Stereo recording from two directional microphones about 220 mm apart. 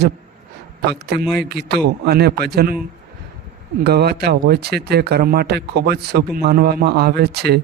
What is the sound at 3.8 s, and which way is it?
Speech, 45° right (ahead or behind).